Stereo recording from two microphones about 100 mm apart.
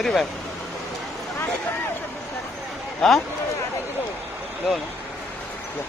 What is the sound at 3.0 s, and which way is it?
Speech, 5° left (ahead or behind).